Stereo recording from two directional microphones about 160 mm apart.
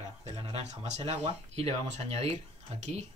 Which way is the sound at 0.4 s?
40° right (ahead or behind).